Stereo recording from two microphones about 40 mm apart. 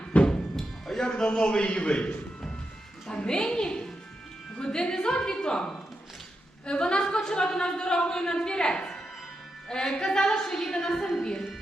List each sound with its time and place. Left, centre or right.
0.1 s music: left
0.5 s music: centre
1.1 s a woman's voice: left